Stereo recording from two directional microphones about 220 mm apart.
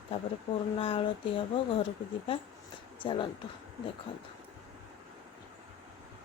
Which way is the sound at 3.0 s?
20° left (ahead or behind).